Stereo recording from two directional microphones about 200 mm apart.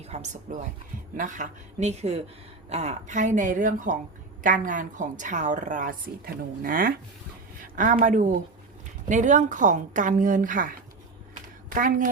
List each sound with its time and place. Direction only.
0.0 s a woman's voice: 35° right (ahead or behind)